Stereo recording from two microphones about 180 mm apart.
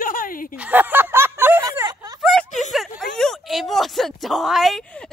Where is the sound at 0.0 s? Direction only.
50° left (ahead or behind).